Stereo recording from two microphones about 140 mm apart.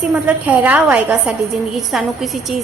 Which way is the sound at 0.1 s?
10° right (ahead or behind).